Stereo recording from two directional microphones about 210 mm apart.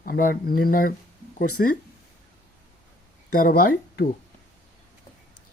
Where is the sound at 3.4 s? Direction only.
40° left (ahead or behind).